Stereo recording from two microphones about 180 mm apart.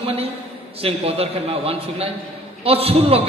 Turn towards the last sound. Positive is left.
turn(degrees=-35)  # may be behind; listen again after turning